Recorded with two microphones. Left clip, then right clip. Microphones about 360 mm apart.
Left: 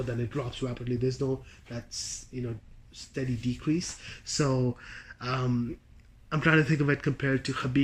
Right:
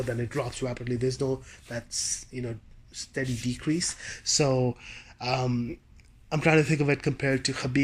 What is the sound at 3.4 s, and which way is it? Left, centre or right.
Speech, centre.